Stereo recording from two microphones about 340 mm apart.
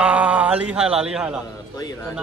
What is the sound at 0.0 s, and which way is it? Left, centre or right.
Speech, centre.